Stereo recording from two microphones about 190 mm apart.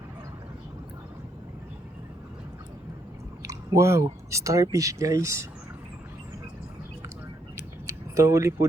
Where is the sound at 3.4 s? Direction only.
15° right (ahead or behind).